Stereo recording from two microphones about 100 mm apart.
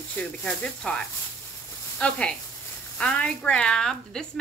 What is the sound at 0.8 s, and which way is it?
A woman's voice, 10° left (ahead or behind).